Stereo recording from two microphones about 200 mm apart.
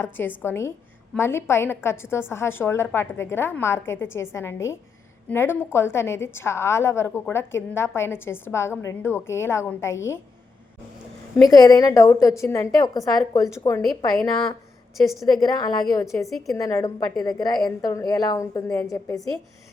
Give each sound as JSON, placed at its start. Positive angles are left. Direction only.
{"t": 0.0, "sound": "a woman's voice", "side_deg": 10}
{"t": 11.5, "sound": "a woman's voice", "side_deg": 20}
{"t": 14.9, "sound": "a woman's voice", "side_deg": 0}
{"t": 15.4, "sound": "a woman's voice", "side_deg": 20}